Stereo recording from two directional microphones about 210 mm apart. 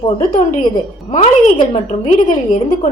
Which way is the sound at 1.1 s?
30° left (ahead or behind).